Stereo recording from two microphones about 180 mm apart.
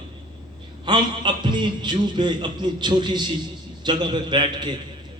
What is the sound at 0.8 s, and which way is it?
A man's voice, 25° right (ahead or behind).